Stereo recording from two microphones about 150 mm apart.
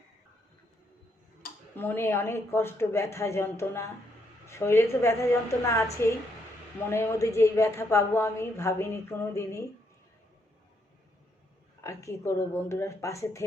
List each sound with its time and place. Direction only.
1.7 s a woman's voice: 15° left (ahead or behind)
11.8 s a woman's voice: 20° left (ahead or behind)